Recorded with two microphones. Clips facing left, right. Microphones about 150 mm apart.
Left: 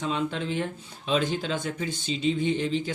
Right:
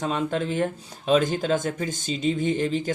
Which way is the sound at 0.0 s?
45° right (ahead or behind).